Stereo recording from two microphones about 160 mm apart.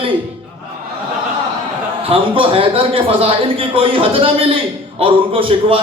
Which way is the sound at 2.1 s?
35° right (ahead or behind).